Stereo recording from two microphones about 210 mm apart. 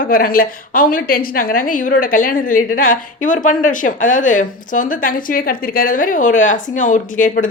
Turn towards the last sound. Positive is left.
turn(degrees=40)  # may be behind; listen again after turning